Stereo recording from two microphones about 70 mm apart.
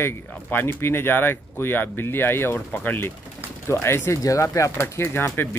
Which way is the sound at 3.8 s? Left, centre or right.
Left.